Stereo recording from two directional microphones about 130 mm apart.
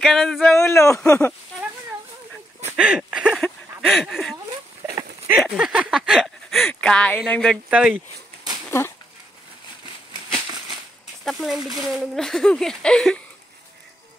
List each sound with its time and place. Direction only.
0.0 s speech: centre (ahead or behind)
0.6 s speech: 20° left (ahead or behind)
1.0 s speech: 10° left (ahead or behind)
2.7 s a sound: 5° right (ahead or behind)
4.8 s a sound: 15° right (ahead or behind); by 6.7 s centre (ahead or behind)
6.7 s speech: 5° left (ahead or behind)
7.7 s speech: 10° right (ahead or behind)
8.6 s dog: 20° left (ahead or behind)
11.2 s a sound: centre (ahead or behind)
11.8 s speech: 5° right (ahead or behind)